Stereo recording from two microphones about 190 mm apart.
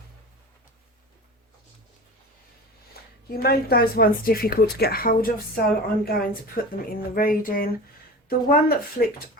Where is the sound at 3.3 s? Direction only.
55° left (ahead or behind).